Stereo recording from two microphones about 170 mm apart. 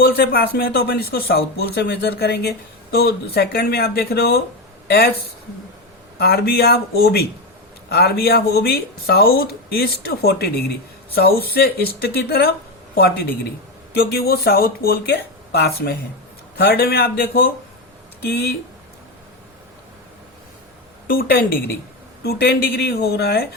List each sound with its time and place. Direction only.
0.0 s speech: 70° left (ahead or behind)
6.1 s a man's voice: 65° left (ahead or behind)
21.1 s a man's voice: 60° left (ahead or behind)